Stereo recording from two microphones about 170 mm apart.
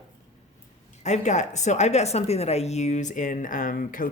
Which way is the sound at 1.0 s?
45° left (ahead or behind).